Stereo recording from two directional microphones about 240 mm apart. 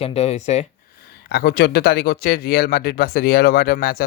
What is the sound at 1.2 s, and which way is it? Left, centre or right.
Speech, left.